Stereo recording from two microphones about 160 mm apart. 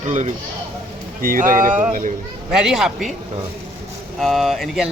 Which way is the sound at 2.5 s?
5° right (ahead or behind).